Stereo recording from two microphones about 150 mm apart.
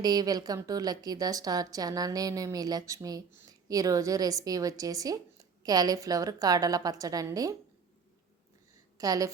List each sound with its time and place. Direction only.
0.0 s a woman's voice: 25° right (ahead or behind)
9.0 s a woman's voice: 25° right (ahead or behind)